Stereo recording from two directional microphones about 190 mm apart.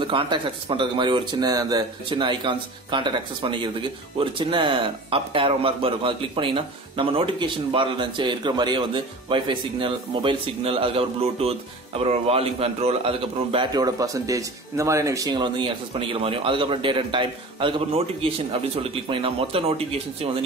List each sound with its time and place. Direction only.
0.0 s speech: 25° right (ahead or behind)